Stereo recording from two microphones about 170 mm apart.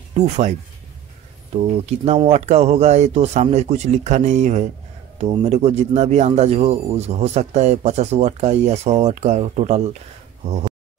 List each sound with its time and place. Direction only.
0.2 s speech: 40° right (ahead or behind)
1.6 s speech: 40° right (ahead or behind)